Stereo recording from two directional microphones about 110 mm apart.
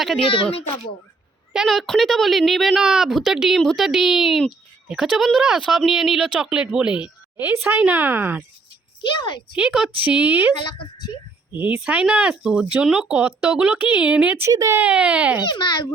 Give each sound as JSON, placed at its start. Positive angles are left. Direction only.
{"t": 1.5, "sound": "speech", "side_deg": 0}
{"t": 9.0, "sound": "a child's voice", "side_deg": 45}
{"t": 9.6, "sound": "speech", "side_deg": -10}
{"t": 10.6, "sound": "a child's voice", "side_deg": 50}
{"t": 11.5, "sound": "speech", "side_deg": -15}
{"t": 14.5, "sound": "speech", "side_deg": -30}
{"t": 14.8, "sound": "speech", "side_deg": -10}
{"t": 15.4, "sound": "a child's voice", "side_deg": 45}